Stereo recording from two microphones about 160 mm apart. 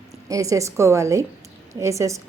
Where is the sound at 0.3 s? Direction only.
20° right (ahead or behind).